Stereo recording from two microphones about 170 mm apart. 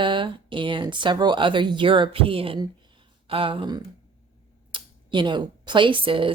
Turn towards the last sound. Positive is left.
turn(degrees=-30)  # may be behind; listen again after turning